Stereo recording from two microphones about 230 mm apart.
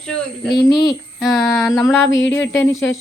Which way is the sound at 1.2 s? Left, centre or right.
Centre.